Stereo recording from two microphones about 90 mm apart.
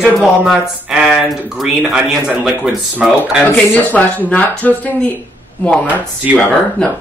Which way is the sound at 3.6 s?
15° left (ahead or behind).